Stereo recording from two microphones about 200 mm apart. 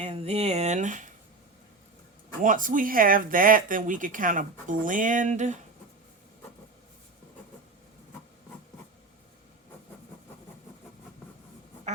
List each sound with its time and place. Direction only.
0.0 s speech: 30° right (ahead or behind)
2.4 s speech: 40° right (ahead or behind)